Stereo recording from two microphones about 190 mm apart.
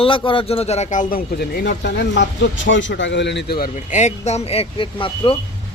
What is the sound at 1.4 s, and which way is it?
Speech, 60° left (ahead or behind).